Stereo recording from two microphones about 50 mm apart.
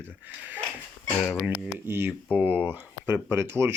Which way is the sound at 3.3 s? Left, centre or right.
Right.